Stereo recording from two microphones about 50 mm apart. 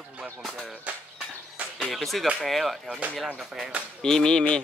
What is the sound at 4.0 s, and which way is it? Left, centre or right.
Speech, centre.